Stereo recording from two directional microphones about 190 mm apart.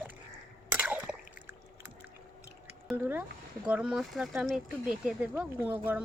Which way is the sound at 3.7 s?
5° right (ahead or behind).